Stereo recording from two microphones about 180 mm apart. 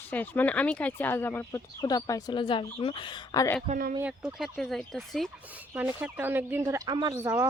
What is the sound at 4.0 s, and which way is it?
Speech, 5° right (ahead or behind).